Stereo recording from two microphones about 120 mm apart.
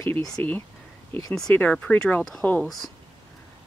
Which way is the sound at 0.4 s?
15° left (ahead or behind).